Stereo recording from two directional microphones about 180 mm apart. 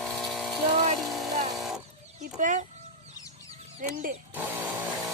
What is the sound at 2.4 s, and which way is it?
Speech, 45° right (ahead or behind).